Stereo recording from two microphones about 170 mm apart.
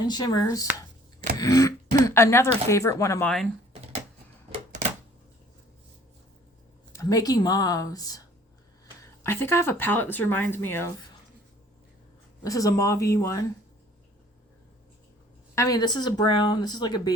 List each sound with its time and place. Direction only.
0.0 s speech: 25° left (ahead or behind)
1.4 s throat clearing: 20° left (ahead or behind)
2.0 s speech: 15° left (ahead or behind)
4.5 s a sound: 40° right (ahead or behind)
6.9 s speech: 20° left (ahead or behind)
9.2 s speech: 15° left (ahead or behind)
12.4 s speech: 20° left (ahead or behind)
15.5 s speech: 20° left (ahead or behind)